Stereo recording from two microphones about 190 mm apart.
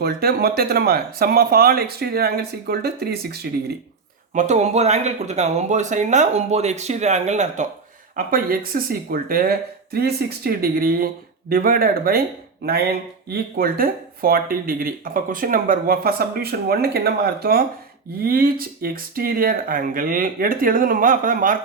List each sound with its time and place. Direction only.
0.0 s speech: 55° right (ahead or behind)
4.4 s speech: 35° right (ahead or behind)
8.1 s speech: 50° right (ahead or behind)